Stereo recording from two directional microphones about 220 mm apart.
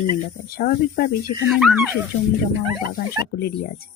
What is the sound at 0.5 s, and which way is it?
Speech, 45° left (ahead or behind).